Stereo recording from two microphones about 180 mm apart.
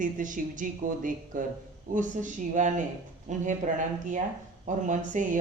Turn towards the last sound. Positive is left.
turn(degrees=-45)  # may be behind; listen again after turning